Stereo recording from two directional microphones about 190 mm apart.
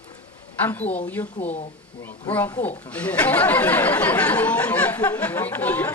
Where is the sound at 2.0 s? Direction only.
10° left (ahead or behind).